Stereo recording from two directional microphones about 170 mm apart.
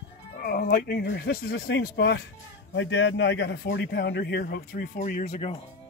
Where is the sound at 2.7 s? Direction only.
90° left; by 5.0 s 70° left (ahead or behind).